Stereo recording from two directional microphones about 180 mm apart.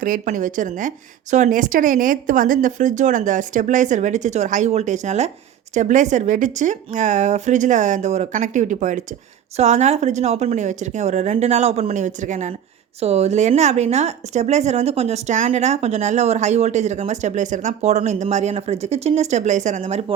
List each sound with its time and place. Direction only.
0.0 s a woman's voice: 50° right (ahead or behind)